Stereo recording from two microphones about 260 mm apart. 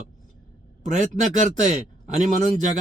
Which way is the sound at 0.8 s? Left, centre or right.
Right.